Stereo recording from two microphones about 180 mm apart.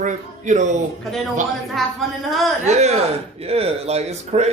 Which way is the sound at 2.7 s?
40° right (ahead or behind).